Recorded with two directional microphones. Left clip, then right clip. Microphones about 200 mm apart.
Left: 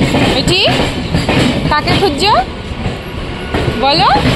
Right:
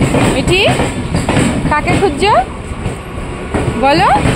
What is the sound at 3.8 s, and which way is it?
Speech, 30° right (ahead or behind).